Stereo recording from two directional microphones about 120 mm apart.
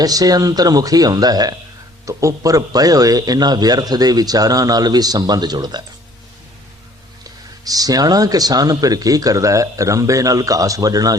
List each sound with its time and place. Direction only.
0.0 s speech: 30° right (ahead or behind)
7.3 s speech: 30° right (ahead or behind)